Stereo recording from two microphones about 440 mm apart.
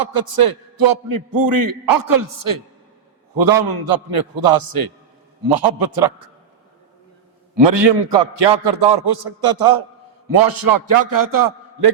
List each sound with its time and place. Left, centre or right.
0.0 s a man's voice: right
7.5 s a man's voice: right